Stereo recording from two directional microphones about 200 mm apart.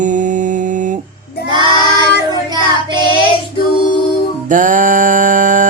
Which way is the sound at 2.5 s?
20° right (ahead or behind).